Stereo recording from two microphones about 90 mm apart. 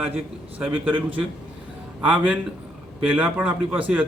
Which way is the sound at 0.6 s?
20° right (ahead or behind).